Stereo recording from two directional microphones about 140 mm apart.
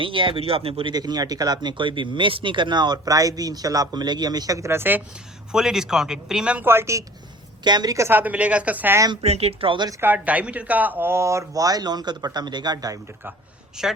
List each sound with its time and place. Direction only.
0.0 s speech: 35° right (ahead or behind); by 5.0 s 15° right (ahead or behind)
5.5 s speech: 5° right (ahead or behind); by 7.0 s 20° right (ahead or behind)
7.6 s speech: 30° right (ahead or behind); by 9.0 s 15° right (ahead or behind)
9.2 s speech: 45° right (ahead or behind)
10.0 s speech: 10° right (ahead or behind); by 13.0 s 25° right (ahead or behind)
13.8 s speech: 5° right (ahead or behind)